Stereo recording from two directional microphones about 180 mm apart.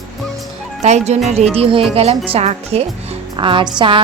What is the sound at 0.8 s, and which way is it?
A woman's voice, 40° right (ahead or behind).